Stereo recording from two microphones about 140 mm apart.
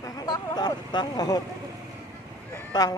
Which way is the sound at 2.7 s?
30° left (ahead or behind).